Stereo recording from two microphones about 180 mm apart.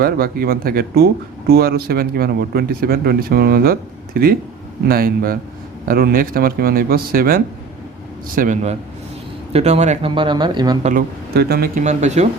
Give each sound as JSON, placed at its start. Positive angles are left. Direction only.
{"t": 0.0, "sound": "a man's voice", "side_deg": -55}
{"t": 10.2, "sound": "speech", "side_deg": -25}
{"t": 11.3, "sound": "speech", "side_deg": -60}
{"t": 11.8, "sound": "a man's voice", "side_deg": -40}